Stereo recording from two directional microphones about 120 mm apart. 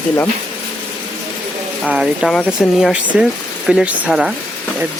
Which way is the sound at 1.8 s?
5° right (ahead or behind).